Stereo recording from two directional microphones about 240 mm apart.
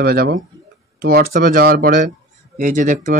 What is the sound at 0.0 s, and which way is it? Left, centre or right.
Speech, right.